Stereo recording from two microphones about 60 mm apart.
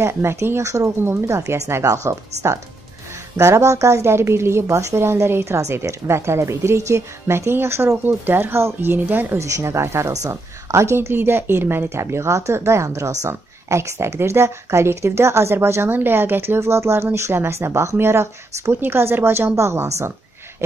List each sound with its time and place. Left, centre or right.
0.0 s speech: right
1.0 s speech: right
9.4 s a woman's voice: right
11.0 s a woman's voice: right
13.3 s speech: right